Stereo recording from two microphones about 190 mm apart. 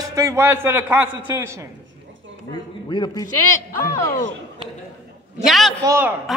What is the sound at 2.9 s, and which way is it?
Speech, 25° left (ahead or behind).